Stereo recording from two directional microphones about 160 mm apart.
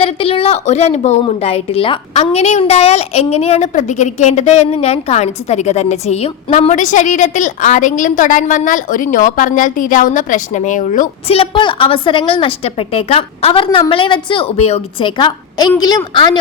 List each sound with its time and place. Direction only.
0.0 s a woman's voice: 35° left (ahead or behind); by 11.3 s 50° left (ahead or behind)
11.3 s a woman's voice: 30° left (ahead or behind)